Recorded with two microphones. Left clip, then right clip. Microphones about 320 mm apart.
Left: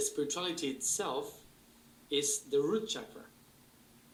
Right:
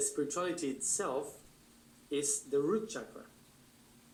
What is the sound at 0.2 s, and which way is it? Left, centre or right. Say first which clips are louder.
Speech: even; centre.